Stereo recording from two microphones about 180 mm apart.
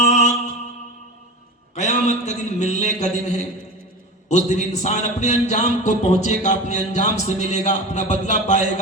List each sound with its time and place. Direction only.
0.0 s music: 40° left (ahead or behind)
1.7 s a sound: 40° left (ahead or behind)
4.3 s a man's voice: 40° left (ahead or behind)